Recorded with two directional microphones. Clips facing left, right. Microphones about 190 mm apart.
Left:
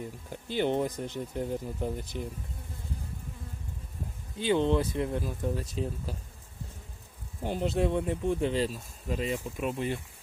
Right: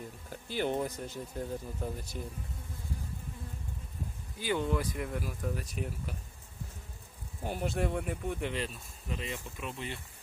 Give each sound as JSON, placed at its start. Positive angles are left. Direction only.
{"t": 0.4, "sound": "speech", "side_deg": 20}
{"t": 4.4, "sound": "speech", "side_deg": 25}
{"t": 7.4, "sound": "speech", "side_deg": 25}